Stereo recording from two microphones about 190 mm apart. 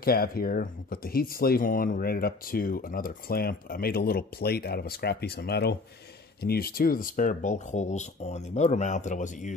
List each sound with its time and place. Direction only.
0.0 s speech: 50° left (ahead or behind)